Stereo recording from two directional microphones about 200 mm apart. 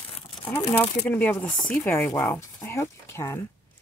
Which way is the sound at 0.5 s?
10° left (ahead or behind).